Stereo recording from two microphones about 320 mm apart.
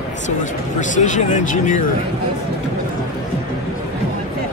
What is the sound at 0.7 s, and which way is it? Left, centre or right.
Speech, left.